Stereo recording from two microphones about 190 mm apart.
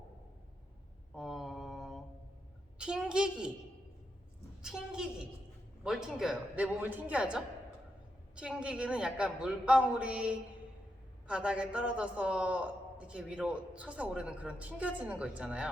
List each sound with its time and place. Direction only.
1.1 s mantra: centre (ahead or behind)
2.7 s a man's voice: 5° right (ahead or behind)
4.6 s a man's voice: 5° right (ahead or behind)